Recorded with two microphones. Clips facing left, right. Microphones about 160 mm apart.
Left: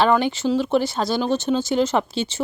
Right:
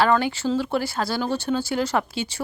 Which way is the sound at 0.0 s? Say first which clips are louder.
Left 2 dB; 20° left (ahead or behind).